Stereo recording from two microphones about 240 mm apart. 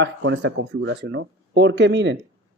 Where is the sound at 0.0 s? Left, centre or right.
Right.